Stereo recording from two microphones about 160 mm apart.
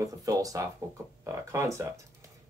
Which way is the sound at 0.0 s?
20° right (ahead or behind).